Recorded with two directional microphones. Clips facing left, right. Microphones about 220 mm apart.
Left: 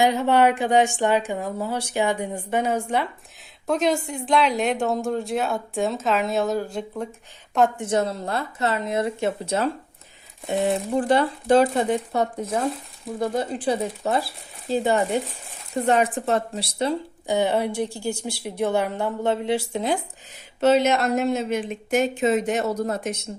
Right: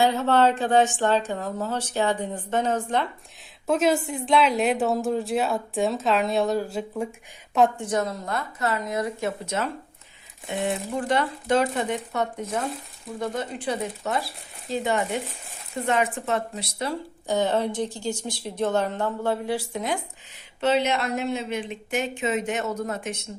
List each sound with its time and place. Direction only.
0.0 s a woman's voice: 15° left (ahead or behind)
3.7 s a woman's voice: 5° right (ahead or behind)
7.8 s speech: 25° left (ahead or behind)
17.2 s a woman's voice: 15° left (ahead or behind); by 20.0 s 30° left (ahead or behind)
20.6 s speech: 45° left (ahead or behind)